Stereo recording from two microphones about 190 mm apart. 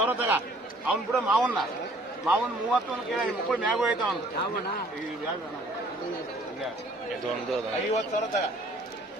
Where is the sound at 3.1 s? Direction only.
Centre (ahead or behind).